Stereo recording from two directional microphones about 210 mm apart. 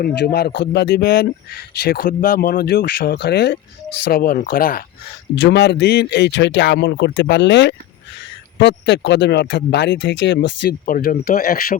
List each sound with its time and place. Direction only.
0.0 s a man's voice: 50° left (ahead or behind)
5.3 s a man's voice: 55° left (ahead or behind)